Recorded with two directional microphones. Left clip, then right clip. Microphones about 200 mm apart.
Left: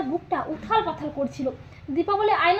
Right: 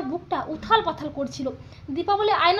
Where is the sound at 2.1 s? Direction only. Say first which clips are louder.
Right 1 dB; 25° left (ahead or behind).